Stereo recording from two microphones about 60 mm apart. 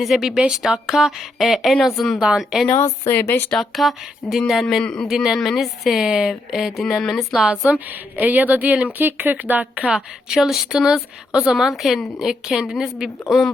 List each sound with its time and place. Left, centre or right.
0.0 s a woman's voice: centre
2.2 s a woman's voice: centre
3.2 s speech: left
3.5 s speech: centre
4.8 s speech: centre
5.0 s speech: centre
8.2 s speech: right
9.0 s speech: right
9.9 s a woman's voice: centre